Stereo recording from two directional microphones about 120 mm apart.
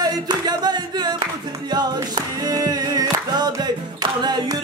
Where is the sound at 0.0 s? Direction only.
35° right (ahead or behind).